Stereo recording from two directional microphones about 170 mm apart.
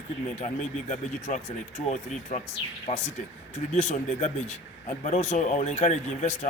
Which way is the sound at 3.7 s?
45° left (ahead or behind).